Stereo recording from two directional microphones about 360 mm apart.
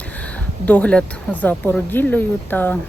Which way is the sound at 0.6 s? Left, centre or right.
Centre.